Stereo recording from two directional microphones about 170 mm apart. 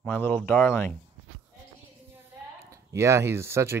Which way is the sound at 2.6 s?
15° right (ahead or behind).